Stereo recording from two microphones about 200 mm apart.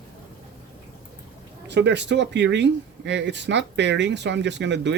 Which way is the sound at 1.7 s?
60° right (ahead or behind).